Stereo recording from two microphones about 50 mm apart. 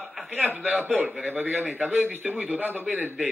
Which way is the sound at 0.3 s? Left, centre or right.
Right.